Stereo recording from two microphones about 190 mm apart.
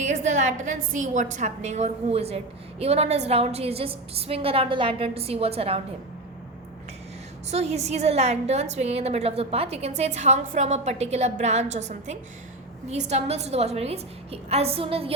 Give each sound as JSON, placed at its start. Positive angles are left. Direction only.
{"t": 0.0, "sound": "a woman's voice", "side_deg": -40}
{"t": 7.5, "sound": "a woman's voice", "side_deg": -35}